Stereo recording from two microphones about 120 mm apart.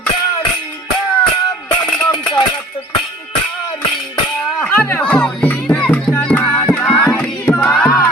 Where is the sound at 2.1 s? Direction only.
40° left (ahead or behind).